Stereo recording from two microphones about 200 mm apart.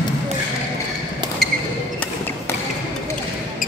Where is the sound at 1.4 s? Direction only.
Centre (ahead or behind).